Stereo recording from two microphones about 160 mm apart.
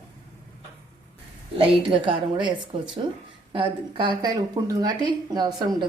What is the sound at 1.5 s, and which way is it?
A woman's voice, 35° right (ahead or behind).